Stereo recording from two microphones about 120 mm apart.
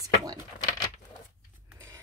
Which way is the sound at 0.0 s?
30° right (ahead or behind).